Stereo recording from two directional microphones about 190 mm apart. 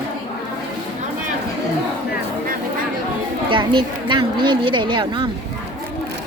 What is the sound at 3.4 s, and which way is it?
A woman's voice, 25° right (ahead or behind).